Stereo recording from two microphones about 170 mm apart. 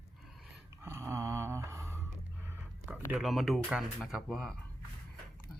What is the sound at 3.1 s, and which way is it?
Speech, centre (ahead or behind).